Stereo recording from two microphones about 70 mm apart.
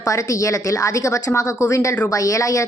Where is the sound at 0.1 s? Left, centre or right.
Left.